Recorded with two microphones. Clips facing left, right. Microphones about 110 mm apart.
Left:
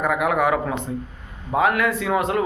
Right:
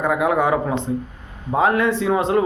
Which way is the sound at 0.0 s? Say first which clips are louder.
Right 2 dB; 25° right (ahead or behind).